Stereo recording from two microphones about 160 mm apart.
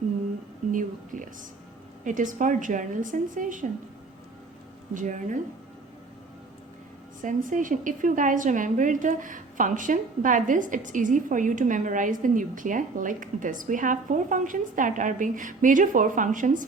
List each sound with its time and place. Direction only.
0.7 s a woman's voice: 55° right (ahead or behind)
4.9 s a woman's voice: 55° right (ahead or behind)
7.2 s a woman's voice: 55° right (ahead or behind)